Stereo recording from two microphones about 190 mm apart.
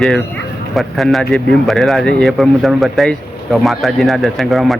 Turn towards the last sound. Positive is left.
turn(degrees=0)  # may be behind; listen again after turning